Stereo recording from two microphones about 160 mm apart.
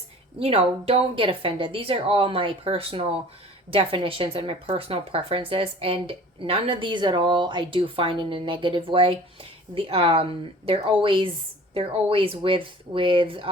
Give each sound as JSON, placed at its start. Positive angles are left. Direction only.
{"t": 0.3, "sound": "a woman's voice", "side_deg": -35}